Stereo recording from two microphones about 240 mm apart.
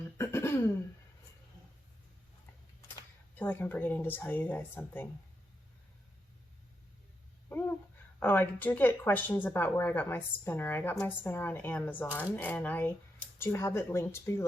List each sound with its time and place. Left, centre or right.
0.2 s throat clearing: centre
3.3 s speech: centre
8.2 s speech: centre